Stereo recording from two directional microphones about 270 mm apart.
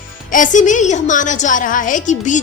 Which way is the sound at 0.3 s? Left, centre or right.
Left.